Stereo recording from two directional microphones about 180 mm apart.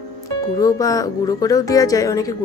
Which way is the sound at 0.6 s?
20° left (ahead or behind).